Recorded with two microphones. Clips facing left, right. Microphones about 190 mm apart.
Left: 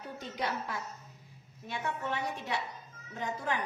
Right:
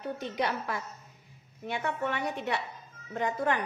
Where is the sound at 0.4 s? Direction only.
65° right (ahead or behind).